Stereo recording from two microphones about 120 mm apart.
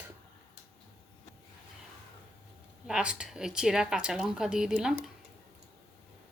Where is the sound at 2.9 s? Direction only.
10° right (ahead or behind).